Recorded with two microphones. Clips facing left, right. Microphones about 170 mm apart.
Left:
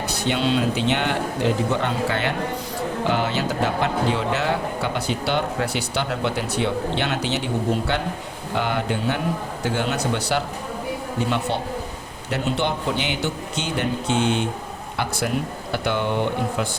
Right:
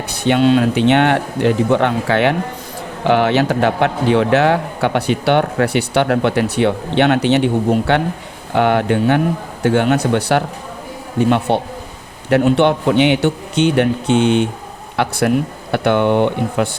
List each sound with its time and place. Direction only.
0.1 s a man's voice: 60° right (ahead or behind)